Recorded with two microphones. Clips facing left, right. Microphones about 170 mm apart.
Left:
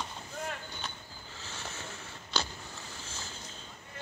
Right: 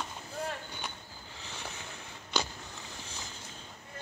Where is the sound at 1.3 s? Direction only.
15° right (ahead or behind).